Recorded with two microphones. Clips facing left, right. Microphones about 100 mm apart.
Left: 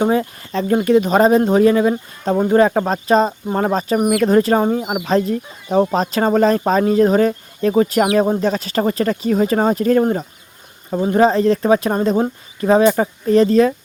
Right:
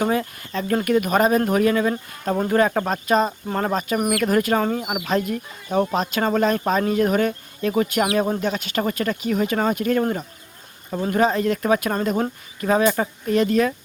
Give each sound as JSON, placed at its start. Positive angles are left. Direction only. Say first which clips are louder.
{"t": 0.0, "sound": "speech", "louder": "left 5 dB", "side_deg": 30}
{"t": 2.3, "sound": "speech", "louder": "left 6 dB", "side_deg": 15}
{"t": 2.6, "sound": "speech", "louder": "left 5 dB", "side_deg": 30}
{"t": 11.2, "sound": "speech", "louder": "left 6 dB", "side_deg": 30}